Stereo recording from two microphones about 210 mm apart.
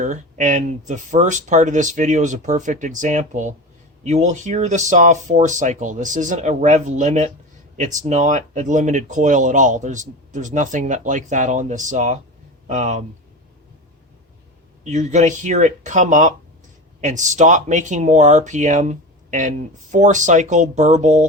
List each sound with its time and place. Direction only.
0.0 s speech: 35° right (ahead or behind)
14.8 s speech: 35° right (ahead or behind)